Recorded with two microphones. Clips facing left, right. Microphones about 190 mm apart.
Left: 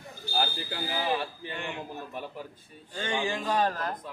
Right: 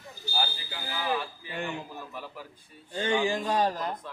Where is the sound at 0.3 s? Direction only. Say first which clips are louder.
Left 3 dB; 55° left (ahead or behind).